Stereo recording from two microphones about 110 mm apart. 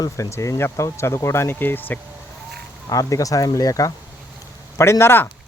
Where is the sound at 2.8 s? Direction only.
30° left (ahead or behind).